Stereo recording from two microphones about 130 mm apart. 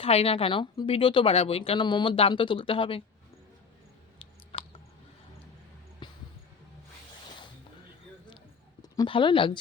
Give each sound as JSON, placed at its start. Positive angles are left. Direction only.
{"t": 0.0, "sound": "speech", "side_deg": 50}
{"t": 6.0, "sound": "music", "side_deg": 35}
{"t": 9.0, "sound": "speech", "side_deg": 40}